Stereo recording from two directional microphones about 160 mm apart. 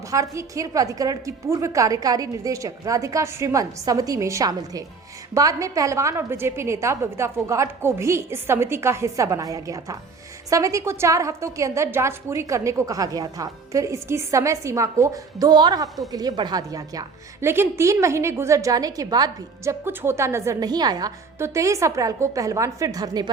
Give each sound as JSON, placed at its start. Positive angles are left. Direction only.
{"t": 0.1, "sound": "a woman's voice", "side_deg": -20}